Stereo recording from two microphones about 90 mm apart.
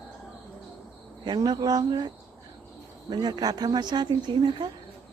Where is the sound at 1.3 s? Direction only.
50° right (ahead or behind).